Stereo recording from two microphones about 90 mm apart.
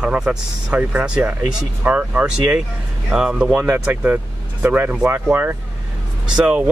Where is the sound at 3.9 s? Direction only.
20° right (ahead or behind).